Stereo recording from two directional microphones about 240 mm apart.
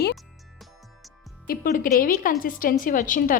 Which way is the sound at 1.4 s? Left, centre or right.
Left.